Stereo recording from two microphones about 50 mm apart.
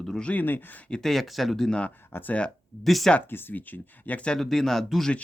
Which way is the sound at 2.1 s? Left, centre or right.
Left.